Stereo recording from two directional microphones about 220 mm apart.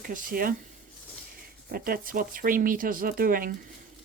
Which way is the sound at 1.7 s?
40° right (ahead or behind).